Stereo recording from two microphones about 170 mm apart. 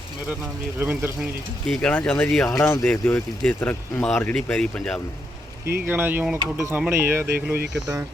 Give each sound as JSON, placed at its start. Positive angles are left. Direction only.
{"t": 0.8, "sound": "speech", "side_deg": -10}
{"t": 1.6, "sound": "speech", "side_deg": 5}
{"t": 2.6, "sound": "speech", "side_deg": 15}
{"t": 5.8, "sound": "speech", "side_deg": -10}
{"t": 7.6, "sound": "speech", "side_deg": -90}